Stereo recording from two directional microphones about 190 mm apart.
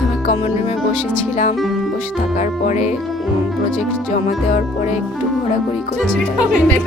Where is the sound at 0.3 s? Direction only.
35° left (ahead or behind).